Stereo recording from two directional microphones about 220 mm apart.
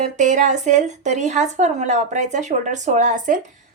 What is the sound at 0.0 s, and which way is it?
A woman's voice, 35° right (ahead or behind).